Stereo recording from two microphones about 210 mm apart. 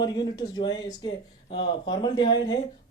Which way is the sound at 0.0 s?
20° left (ahead or behind).